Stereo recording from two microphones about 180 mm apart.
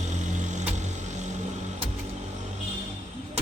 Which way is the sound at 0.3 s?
40° right (ahead or behind).